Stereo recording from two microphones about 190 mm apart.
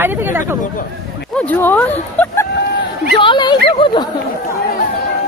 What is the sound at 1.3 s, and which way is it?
Speech, 10° left (ahead or behind).